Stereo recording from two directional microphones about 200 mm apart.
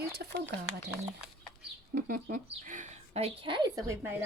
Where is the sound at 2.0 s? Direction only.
45° right (ahead or behind); by 3.9 s 25° right (ahead or behind).